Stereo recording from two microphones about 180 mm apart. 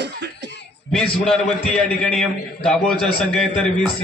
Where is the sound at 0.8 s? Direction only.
5° left (ahead or behind).